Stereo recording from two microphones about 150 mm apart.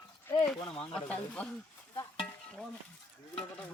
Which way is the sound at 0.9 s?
10° left (ahead or behind).